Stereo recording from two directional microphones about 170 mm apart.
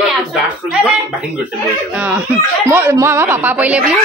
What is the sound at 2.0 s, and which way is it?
A child's voice, 10° right (ahead or behind).